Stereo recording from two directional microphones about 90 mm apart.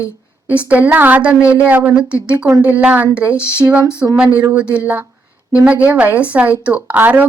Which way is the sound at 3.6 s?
35° right (ahead or behind).